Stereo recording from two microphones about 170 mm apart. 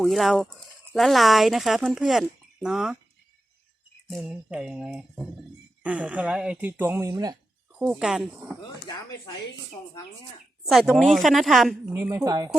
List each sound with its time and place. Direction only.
0.0 s speech: centre (ahead or behind)
4.1 s speech: 5° right (ahead or behind)
7.8 s speech: 5° right (ahead or behind)
10.7 s speech: centre (ahead or behind)
11.9 s a woman's voice: 20° right (ahead or behind)